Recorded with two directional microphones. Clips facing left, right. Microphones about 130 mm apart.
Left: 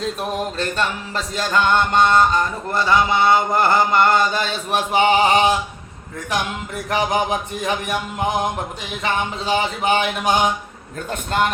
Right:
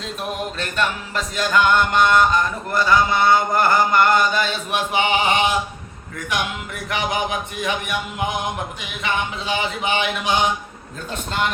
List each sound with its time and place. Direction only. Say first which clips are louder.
0.6 s music: left 1 dB; 30° left (ahead or behind)
6.9 s music: left 3 dB; 35° left (ahead or behind)
11.1 s a man's voice: left 4 dB; 50° left (ahead or behind)